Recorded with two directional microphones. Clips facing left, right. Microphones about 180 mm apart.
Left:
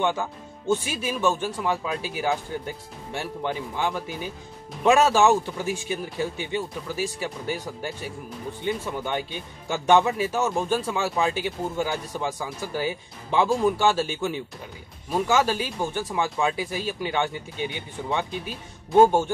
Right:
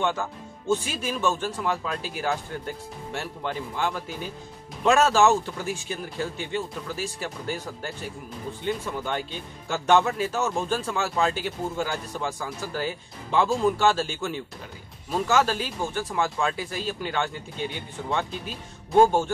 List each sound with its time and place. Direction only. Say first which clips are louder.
0.0 s speech: left 2 dB; 15° left (ahead or behind)